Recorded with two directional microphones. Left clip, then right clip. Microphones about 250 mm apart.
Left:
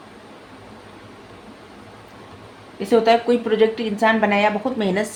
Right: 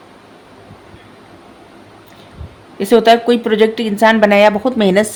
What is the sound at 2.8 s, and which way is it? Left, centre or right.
A man's voice, right.